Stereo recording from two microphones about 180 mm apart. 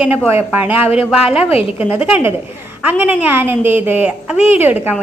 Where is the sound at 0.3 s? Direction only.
10° right (ahead or behind).